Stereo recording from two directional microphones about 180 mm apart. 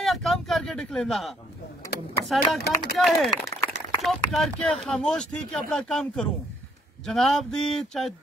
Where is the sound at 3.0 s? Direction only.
Centre (ahead or behind).